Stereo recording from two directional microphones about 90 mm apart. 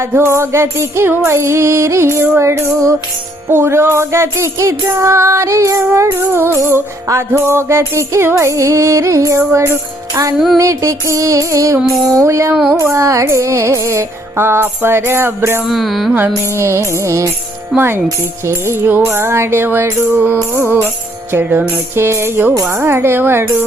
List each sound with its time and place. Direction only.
0.0 s music: 25° right (ahead or behind)
10.3 s music: centre (ahead or behind)
10.6 s music: 35° right (ahead or behind)
15.6 s music: centre (ahead or behind)
16.6 s music: 30° right (ahead or behind)
21.9 s music: 30° right (ahead or behind)